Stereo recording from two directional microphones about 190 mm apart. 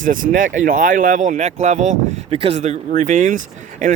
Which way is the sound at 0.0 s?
45° right (ahead or behind).